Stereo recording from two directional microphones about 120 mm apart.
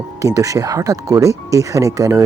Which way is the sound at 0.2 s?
30° right (ahead or behind).